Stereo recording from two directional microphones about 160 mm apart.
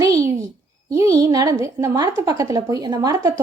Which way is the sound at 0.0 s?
20° right (ahead or behind).